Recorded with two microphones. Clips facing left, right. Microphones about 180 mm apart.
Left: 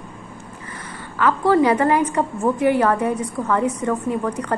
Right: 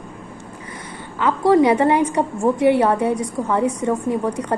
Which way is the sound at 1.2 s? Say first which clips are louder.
Right 2 dB; 15° right (ahead or behind).